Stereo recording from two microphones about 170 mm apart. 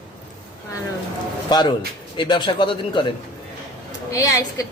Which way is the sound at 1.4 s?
25° left (ahead or behind).